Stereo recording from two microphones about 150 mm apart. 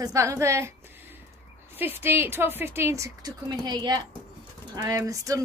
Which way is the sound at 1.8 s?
15° right (ahead or behind).